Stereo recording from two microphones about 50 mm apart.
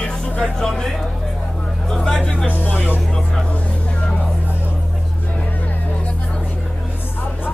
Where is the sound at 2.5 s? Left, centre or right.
Left.